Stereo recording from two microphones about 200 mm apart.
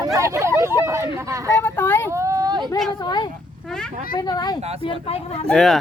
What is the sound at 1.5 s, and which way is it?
Vehicle, 10° left (ahead or behind).